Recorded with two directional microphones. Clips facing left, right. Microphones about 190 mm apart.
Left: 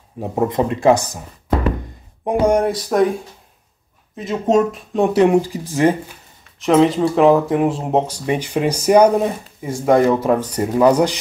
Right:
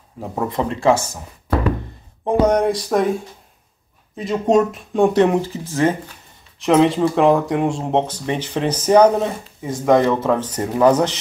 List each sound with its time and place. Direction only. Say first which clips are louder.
0.2 s speech: left 4 dB; 20° left (ahead or behind); by 3.1 s centre (ahead or behind)
4.2 s speech: even; centre (ahead or behind)
6.6 s speech: left 1 dB; centre (ahead or behind)